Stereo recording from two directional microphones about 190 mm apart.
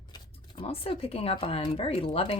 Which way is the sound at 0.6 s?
30° left (ahead or behind).